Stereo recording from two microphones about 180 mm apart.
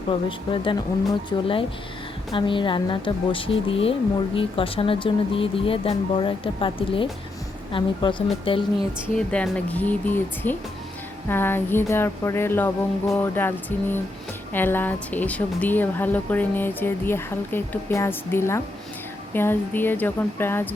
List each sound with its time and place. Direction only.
0.1 s a woman's voice: 30° left (ahead or behind)
9.1 s speech: 5° left (ahead or behind)